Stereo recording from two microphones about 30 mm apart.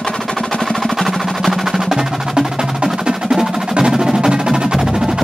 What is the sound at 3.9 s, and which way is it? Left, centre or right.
Music, right.